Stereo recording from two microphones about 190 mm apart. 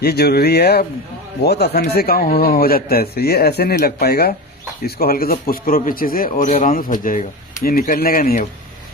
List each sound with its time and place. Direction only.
0.0 s speech: 55° left (ahead or behind)
6.3 s speech: 35° left (ahead or behind)